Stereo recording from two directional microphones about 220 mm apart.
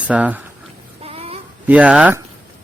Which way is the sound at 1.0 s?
25° right (ahead or behind).